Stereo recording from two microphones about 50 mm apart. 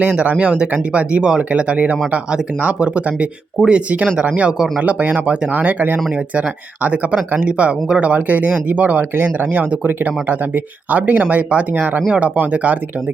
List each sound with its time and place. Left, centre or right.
0.0 s speech: right